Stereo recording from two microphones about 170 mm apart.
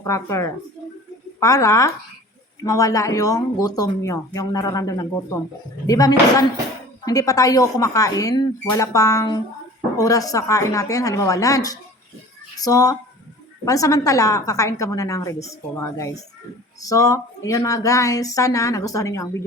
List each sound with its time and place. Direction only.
0.0 s speech: 15° left (ahead or behind)